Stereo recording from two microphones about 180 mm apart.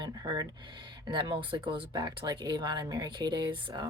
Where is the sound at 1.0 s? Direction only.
25° right (ahead or behind).